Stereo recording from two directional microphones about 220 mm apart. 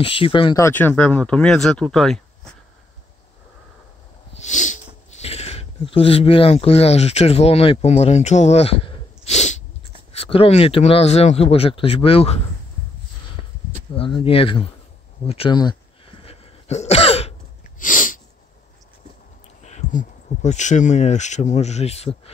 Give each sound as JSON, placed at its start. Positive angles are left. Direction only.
{"t": 0.0, "sound": "speech", "side_deg": 25}
{"t": 4.3, "sound": "speech", "side_deg": 30}
{"t": 13.9, "sound": "speech", "side_deg": 25}
{"t": 15.2, "sound": "sneeze", "side_deg": 25}
{"t": 17.7, "sound": "sneeze", "side_deg": 35}
{"t": 19.6, "sound": "speech", "side_deg": 35}